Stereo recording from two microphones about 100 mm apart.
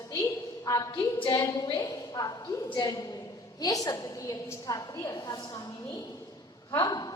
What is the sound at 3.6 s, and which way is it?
A woman's voice, 40° left (ahead or behind).